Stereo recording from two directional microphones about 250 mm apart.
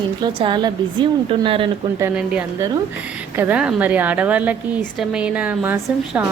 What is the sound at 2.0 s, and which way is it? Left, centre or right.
A woman's voice, centre.